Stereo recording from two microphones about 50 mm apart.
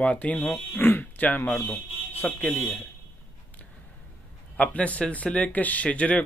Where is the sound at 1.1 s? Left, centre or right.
Left.